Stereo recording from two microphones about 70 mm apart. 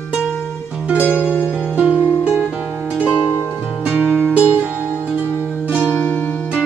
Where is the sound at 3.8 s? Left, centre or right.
Right.